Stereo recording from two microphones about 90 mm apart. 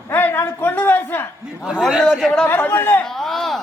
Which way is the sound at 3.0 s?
5° left (ahead or behind).